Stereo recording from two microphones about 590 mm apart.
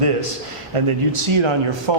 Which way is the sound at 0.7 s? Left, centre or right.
Right.